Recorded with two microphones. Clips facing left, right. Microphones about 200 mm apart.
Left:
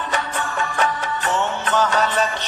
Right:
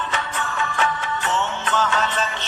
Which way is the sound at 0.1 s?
40° left (ahead or behind).